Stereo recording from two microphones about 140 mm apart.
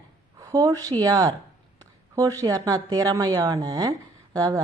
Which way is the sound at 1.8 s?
25° right (ahead or behind).